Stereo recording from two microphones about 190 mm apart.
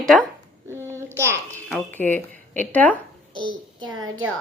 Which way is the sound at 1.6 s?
5° left (ahead or behind).